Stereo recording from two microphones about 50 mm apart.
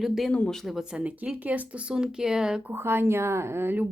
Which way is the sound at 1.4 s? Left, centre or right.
Right.